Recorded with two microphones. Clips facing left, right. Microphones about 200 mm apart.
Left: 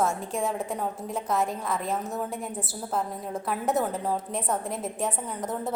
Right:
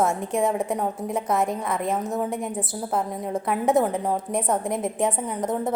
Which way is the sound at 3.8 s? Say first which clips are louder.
Right 4 dB; 15° right (ahead or behind).